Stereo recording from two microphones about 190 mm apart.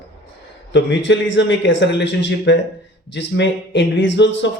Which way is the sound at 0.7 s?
70° left (ahead or behind).